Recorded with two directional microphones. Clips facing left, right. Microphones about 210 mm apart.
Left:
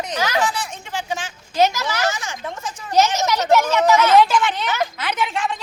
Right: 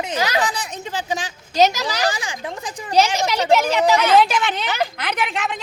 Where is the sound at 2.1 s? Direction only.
15° right (ahead or behind).